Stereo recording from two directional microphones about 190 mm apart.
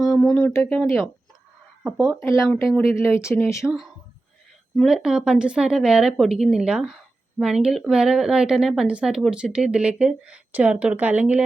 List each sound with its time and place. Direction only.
0.1 s a sound: 20° left (ahead or behind)
0.3 s a woman's voice: 5° left (ahead or behind)
2.6 s speech: 15° left (ahead or behind)
3.6 s a woman's voice: 5° right (ahead or behind)